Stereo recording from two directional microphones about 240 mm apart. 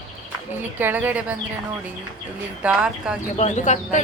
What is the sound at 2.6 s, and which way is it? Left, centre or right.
Speech, centre.